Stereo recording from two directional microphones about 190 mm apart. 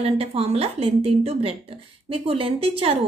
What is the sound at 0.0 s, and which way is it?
A woman's voice, 30° right (ahead or behind).